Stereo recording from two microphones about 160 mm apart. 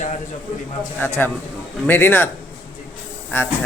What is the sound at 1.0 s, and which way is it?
A man's voice, 10° left (ahead or behind).